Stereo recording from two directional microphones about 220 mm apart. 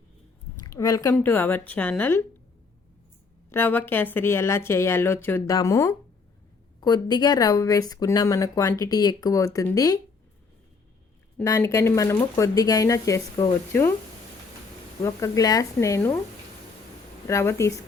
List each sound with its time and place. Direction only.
0.7 s speech: 15° left (ahead or behind)
3.5 s speech: 10° left (ahead or behind)
11.3 s speech: 15° left (ahead or behind)
15.0 s speech: 15° left (ahead or behind)
17.2 s speech: 10° left (ahead or behind)